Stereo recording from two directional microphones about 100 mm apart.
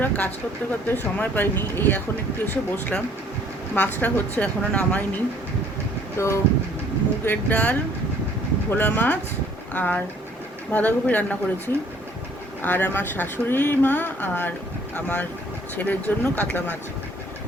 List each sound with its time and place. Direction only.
0.0 s speech: 15° left (ahead or behind)
3.8 s a woman's voice: 15° left (ahead or behind)
6.1 s speech: 25° left (ahead or behind)
7.3 s a woman's voice: 15° left (ahead or behind)